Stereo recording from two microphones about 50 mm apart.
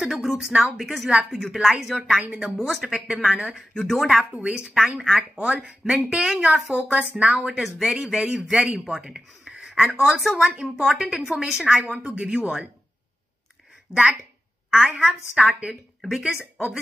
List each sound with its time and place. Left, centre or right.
0.0 s a woman's voice: centre
1.1 s a woman's voice: right
1.5 s a woman's voice: centre
3.5 s speech: centre
4.3 s a woman's voice: right
4.7 s a woman's voice: centre
7.2 s a woman's voice: centre
8.5 s a woman's voice: centre
9.5 s a sound: centre
10.0 s speech: centre
10.5 s a woman's voice: centre
14.7 s a woman's voice: centre